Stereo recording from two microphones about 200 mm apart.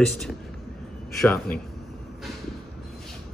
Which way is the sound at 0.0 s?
Centre (ahead or behind).